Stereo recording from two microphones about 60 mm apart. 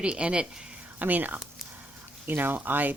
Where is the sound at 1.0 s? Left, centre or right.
Right.